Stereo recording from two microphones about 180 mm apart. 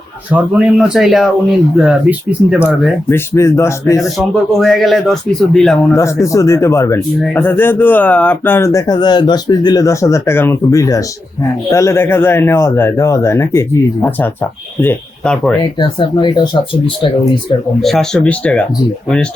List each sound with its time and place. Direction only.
0.3 s speech: 10° right (ahead or behind)
3.1 s speech: 15° left (ahead or behind)
4.0 s speech: centre (ahead or behind)
5.9 s speech: 15° left (ahead or behind)
15.6 s speech: 25° left (ahead or behind)
17.8 s speech: 5° left (ahead or behind)